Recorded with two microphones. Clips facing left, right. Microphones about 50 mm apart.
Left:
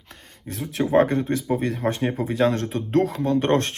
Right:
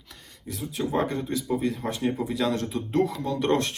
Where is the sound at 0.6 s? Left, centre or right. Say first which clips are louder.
Left 8 dB; left.